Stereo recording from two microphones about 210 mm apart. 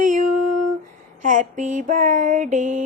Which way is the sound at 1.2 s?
40° right (ahead or behind).